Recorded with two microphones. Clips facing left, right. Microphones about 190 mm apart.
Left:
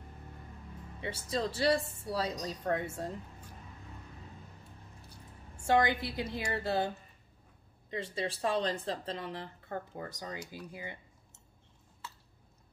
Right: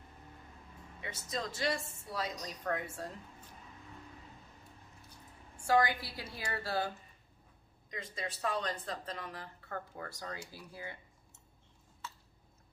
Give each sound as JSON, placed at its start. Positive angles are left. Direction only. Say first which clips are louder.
{"t": 1.0, "sound": "a woman's voice", "louder": "left 6 dB", "side_deg": 30}
{"t": 5.7, "sound": "speech", "louder": "left 2 dB", "side_deg": 25}
{"t": 7.9, "sound": "speech", "louder": "left 6 dB", "side_deg": 30}